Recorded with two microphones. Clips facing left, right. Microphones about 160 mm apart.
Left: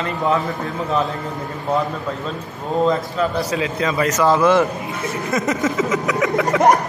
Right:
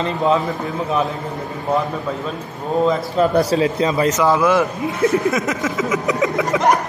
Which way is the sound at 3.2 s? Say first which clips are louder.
Right 5 dB; 40° right (ahead or behind).